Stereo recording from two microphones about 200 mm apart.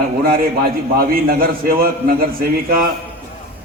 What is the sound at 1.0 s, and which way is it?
A man's voice, 45° right (ahead or behind).